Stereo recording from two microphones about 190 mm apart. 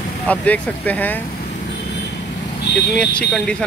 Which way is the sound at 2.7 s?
65° left (ahead or behind).